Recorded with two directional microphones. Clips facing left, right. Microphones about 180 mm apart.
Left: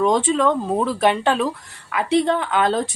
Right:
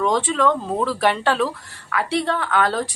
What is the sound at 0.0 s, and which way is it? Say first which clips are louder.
Speech: left 2 dB; 20° left (ahead or behind).